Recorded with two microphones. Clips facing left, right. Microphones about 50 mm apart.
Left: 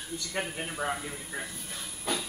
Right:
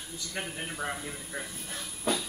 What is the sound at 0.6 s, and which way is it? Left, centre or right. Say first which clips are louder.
Speech: left 1 dB; centre.